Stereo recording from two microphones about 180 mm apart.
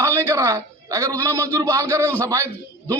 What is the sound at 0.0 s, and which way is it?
A man's voice, 15° right (ahead or behind).